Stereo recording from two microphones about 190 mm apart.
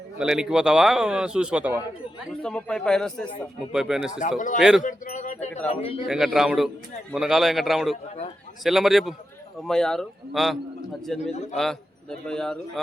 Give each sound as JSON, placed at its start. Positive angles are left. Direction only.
{"t": 0.2, "sound": "a man's voice", "side_deg": -5}
{"t": 2.4, "sound": "a man's voice", "side_deg": 5}
{"t": 4.4, "sound": "a man's voice", "side_deg": 45}
{"t": 6.1, "sound": "a man's voice", "side_deg": 0}
{"t": 11.2, "sound": "speech", "side_deg": 40}
{"t": 11.5, "sound": "a man's voice", "side_deg": 0}